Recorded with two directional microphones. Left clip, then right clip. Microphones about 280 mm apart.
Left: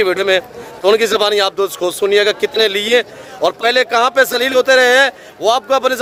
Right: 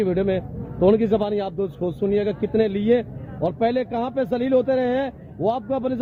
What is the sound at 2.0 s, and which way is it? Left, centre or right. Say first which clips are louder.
Speech: left 10 dB; centre.